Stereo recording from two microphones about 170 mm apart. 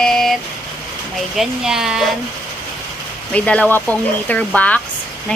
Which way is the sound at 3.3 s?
10° left (ahead or behind).